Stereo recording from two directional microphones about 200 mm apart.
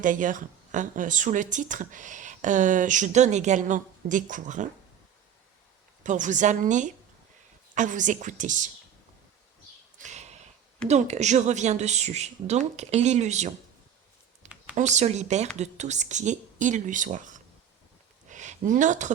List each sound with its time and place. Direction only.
0.0 s speech: 40° right (ahead or behind)
6.0 s speech: 40° right (ahead or behind)
10.0 s a sound: 35° right (ahead or behind)
10.8 s speech: 35° right (ahead or behind)
14.4 s a sound: 35° right (ahead or behind)
14.8 s speech: 35° right (ahead or behind)